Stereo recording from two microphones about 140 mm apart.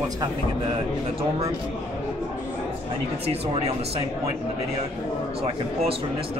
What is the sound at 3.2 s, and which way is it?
Speech, 45° right (ahead or behind).